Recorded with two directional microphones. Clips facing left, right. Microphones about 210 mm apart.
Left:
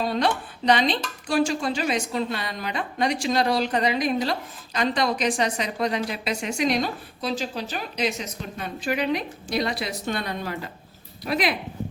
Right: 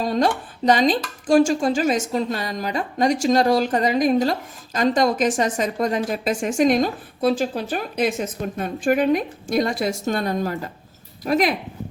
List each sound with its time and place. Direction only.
0.0 s speech: 45° right (ahead or behind)